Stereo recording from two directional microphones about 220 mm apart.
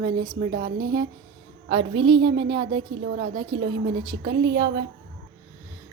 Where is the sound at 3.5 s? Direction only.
55° right (ahead or behind).